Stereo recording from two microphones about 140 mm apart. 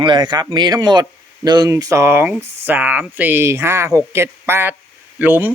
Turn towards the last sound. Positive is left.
turn(degrees=-15)  # may be behind; listen again after turning